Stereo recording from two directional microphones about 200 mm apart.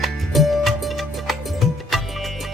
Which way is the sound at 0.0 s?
Centre (ahead or behind).